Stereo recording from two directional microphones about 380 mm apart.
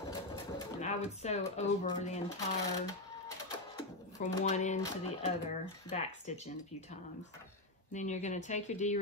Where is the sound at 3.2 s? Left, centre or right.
Centre.